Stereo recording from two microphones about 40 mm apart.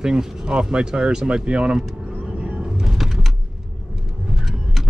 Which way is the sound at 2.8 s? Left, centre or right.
Centre.